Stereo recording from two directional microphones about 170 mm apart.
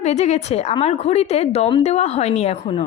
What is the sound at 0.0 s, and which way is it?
A woman's voice, 40° left (ahead or behind).